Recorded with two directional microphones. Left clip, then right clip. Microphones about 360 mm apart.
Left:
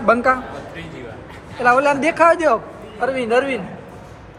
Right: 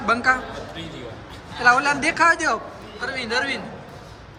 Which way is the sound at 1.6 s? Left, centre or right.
Centre.